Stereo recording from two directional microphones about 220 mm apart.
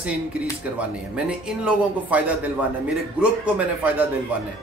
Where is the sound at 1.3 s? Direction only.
5° right (ahead or behind).